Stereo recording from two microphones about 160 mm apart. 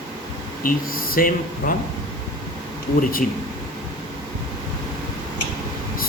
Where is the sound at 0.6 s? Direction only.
65° left (ahead or behind).